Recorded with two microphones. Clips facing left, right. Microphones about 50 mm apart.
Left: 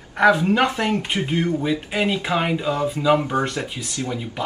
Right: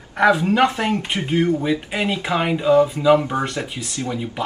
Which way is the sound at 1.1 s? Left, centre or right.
Right.